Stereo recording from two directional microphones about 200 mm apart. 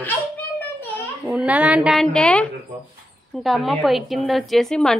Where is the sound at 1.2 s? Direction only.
5° right (ahead or behind).